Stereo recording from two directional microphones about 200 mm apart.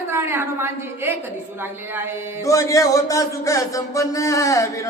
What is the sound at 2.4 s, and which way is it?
Music, 15° left (ahead or behind).